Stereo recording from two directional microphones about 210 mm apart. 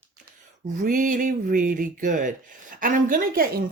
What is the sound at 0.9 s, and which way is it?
Speech, 40° right (ahead or behind).